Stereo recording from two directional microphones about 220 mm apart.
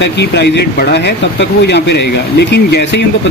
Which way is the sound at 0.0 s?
50° left (ahead or behind).